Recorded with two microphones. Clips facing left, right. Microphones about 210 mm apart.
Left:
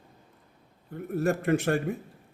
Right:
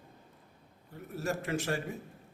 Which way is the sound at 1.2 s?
55° left (ahead or behind).